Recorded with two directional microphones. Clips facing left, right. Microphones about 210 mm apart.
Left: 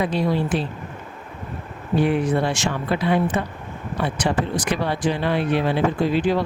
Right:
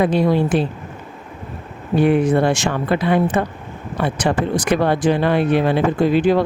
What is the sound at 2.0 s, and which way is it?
Speech, 50° right (ahead or behind).